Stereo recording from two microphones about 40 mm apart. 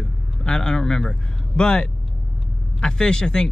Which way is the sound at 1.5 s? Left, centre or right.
Left.